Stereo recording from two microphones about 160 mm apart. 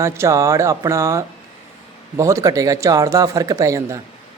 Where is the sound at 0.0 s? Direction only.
20° right (ahead or behind).